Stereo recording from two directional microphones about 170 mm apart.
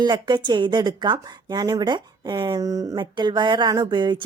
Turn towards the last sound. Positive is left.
turn(degrees=-25)  # may be behind; listen again after turning